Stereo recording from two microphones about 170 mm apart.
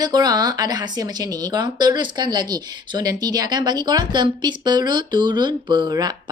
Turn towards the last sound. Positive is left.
turn(degrees=-25)  # may be behind; listen again after turning